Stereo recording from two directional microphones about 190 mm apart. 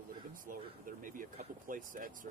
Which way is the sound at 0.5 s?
45° right (ahead or behind).